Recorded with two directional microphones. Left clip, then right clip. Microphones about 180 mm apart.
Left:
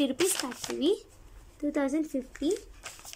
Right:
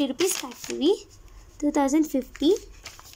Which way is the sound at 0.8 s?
10° right (ahead or behind).